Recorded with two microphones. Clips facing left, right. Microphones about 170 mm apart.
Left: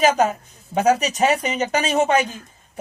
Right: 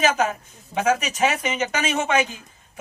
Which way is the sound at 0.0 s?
35° left (ahead or behind).